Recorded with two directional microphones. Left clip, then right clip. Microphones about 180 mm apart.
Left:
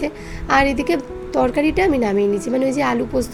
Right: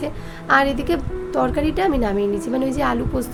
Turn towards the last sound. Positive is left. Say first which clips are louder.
# left 2 dB
turn(degrees=5)  # may be behind; listen again after turning